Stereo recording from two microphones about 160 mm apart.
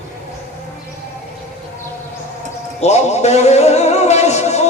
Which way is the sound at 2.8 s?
45° left (ahead or behind).